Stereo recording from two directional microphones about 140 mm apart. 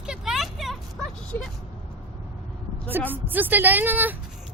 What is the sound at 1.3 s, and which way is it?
Speech, 20° left (ahead or behind).